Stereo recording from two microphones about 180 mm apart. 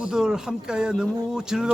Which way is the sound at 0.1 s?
5° right (ahead or behind).